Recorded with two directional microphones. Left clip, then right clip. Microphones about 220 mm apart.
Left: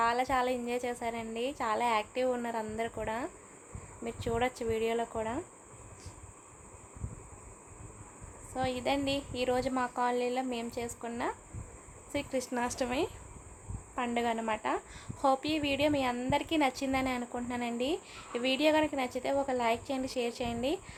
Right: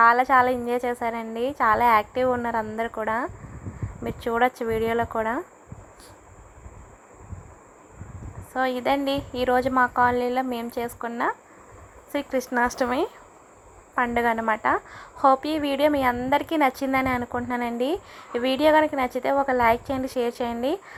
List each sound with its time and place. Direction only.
0.0 s a woman's voice: 15° right (ahead or behind)
8.5 s a woman's voice: 20° right (ahead or behind)